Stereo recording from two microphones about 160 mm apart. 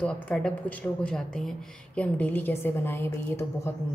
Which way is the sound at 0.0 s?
5° left (ahead or behind).